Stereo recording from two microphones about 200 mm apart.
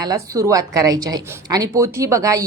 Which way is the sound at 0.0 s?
15° right (ahead or behind).